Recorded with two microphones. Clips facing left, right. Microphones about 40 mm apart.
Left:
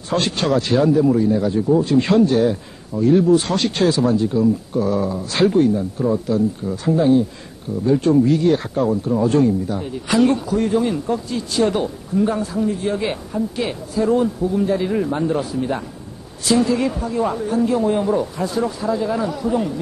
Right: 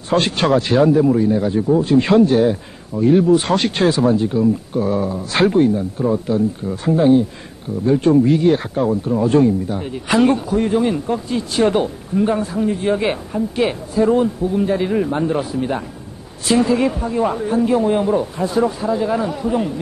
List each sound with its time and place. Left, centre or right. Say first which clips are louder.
0.2 s speech: right 1 dB; right